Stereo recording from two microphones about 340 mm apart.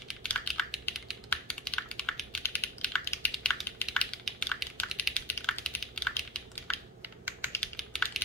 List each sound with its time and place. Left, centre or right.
0.1 s computer keyboard: centre
7.5 s typing: centre